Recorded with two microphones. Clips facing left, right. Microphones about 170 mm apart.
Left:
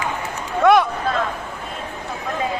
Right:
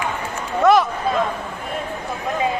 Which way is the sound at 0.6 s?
Centre (ahead or behind).